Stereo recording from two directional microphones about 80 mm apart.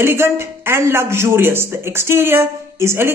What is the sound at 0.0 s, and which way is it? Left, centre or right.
Speech, right.